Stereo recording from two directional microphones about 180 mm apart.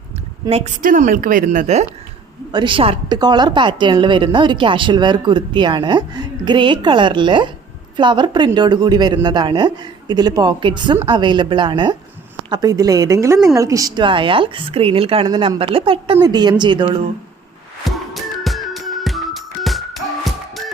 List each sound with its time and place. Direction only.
0.4 s a woman's voice: 35° right (ahead or behind)
0.8 s a woman's voice: 50° right (ahead or behind)
2.5 s a woman's voice: 25° right (ahead or behind)
17.8 s music: centre (ahead or behind)